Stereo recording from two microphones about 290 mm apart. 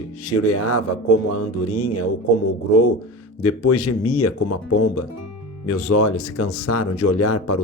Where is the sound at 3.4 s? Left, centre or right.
Left.